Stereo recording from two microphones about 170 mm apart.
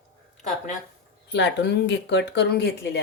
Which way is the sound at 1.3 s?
90° left.